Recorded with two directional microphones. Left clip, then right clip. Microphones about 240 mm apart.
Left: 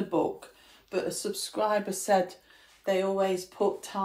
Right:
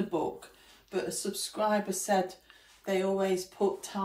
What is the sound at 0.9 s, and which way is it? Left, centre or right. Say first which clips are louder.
Speech: left 3 dB; left.